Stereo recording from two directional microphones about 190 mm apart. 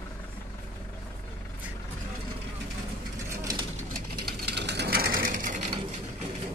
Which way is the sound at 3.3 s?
20° right (ahead or behind).